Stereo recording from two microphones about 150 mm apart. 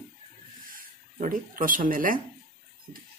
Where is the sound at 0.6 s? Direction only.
65° right (ahead or behind).